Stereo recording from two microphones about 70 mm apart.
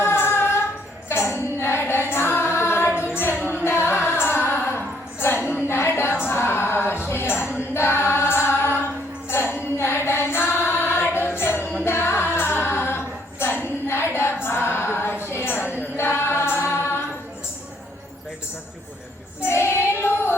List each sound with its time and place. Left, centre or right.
0.0 s music: left
1.0 s singing: left
3.6 s music: left
5.2 s a sound: left
7.5 s female singing: left
9.3 s music: left
11.6 s music: centre
11.9 s music: left
14.4 s female singing: left
15.2 s music: left
19.4 s child singing: left